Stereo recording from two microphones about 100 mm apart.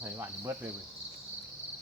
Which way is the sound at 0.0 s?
25° right (ahead or behind).